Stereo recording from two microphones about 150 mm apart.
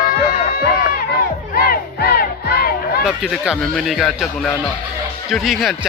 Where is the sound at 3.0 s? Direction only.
5° right (ahead or behind).